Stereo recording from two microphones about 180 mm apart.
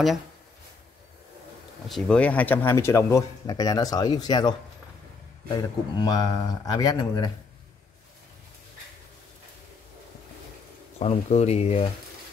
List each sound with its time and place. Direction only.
1.9 s speech: 5° left (ahead or behind); by 7.2 s 20° left (ahead or behind)
11.0 s speech: 35° left (ahead or behind)